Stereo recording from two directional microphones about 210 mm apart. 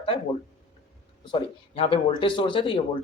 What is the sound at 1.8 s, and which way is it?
Speech, 25° left (ahead or behind).